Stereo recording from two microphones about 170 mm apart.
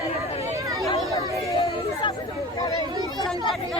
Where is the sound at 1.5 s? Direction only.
30° left (ahead or behind).